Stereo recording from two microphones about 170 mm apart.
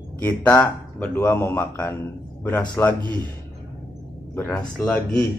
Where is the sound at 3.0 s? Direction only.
25° right (ahead or behind).